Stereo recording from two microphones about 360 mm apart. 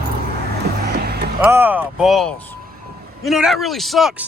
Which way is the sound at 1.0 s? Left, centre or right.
Right.